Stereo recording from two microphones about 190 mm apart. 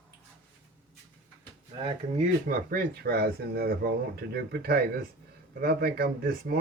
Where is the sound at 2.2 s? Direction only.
45° right (ahead or behind).